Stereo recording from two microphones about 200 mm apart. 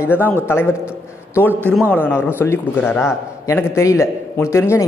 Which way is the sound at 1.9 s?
10° left (ahead or behind).